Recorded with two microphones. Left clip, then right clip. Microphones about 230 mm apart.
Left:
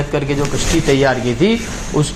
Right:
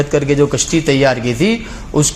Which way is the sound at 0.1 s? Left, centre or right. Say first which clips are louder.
Right 4 dB; right.